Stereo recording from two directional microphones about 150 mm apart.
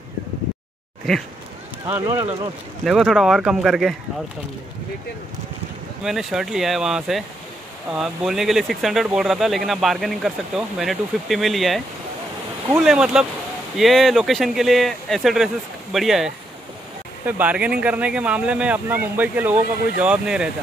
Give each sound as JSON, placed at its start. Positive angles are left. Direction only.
{"t": 1.9, "sound": "speech", "side_deg": -15}
{"t": 2.8, "sound": "speech", "side_deg": 0}
{"t": 6.0, "sound": "speech", "side_deg": 0}
{"t": 12.8, "sound": "speech", "side_deg": -5}